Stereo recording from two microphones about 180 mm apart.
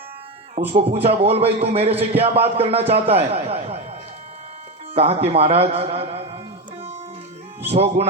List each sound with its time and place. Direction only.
0.7 s a man's voice: 35° right (ahead or behind)
4.9 s a man's voice: 35° right (ahead or behind)
7.7 s a man's voice: 35° right (ahead or behind)